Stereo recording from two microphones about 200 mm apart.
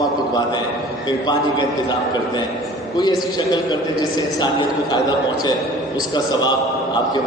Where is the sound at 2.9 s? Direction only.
20° left (ahead or behind).